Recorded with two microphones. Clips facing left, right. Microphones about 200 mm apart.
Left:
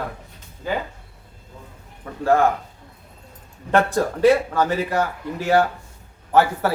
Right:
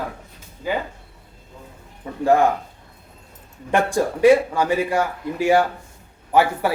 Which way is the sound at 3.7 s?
15° right (ahead or behind).